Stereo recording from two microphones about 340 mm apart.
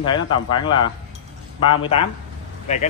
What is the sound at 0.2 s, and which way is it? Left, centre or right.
Speech, left.